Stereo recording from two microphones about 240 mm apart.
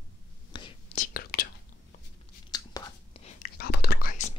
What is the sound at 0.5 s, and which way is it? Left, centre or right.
Whispering, left.